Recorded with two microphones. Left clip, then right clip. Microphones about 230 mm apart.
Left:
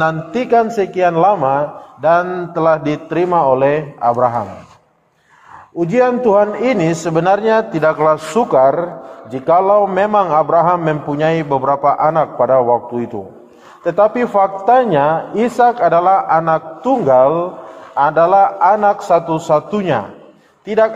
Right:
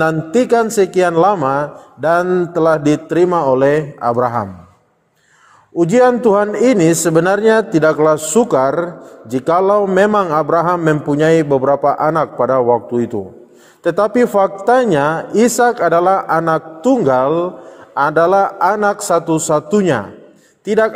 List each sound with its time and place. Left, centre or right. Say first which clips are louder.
0.0 s a man's voice: right 2 dB; right
5.8 s a man's voice: right 2 dB; right